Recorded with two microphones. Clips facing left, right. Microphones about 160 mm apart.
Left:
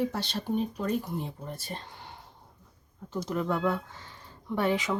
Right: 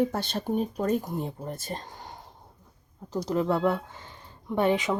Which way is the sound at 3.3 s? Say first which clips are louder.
Right 4 dB; 30° right (ahead or behind).